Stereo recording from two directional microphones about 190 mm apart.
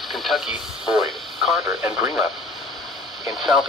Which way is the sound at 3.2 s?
Centre (ahead or behind).